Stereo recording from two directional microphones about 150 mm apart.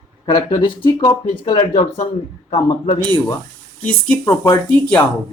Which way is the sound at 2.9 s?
15° left (ahead or behind).